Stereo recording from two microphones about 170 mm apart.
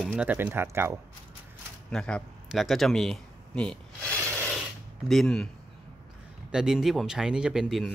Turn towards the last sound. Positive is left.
turn(degrees=0)  # may be behind; listen again after turning